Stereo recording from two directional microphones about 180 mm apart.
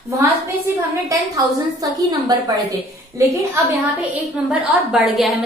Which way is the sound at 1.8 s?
20° right (ahead or behind).